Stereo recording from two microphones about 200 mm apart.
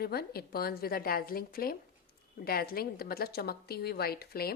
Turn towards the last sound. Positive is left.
turn(degrees=50)  # may be behind; listen again after turning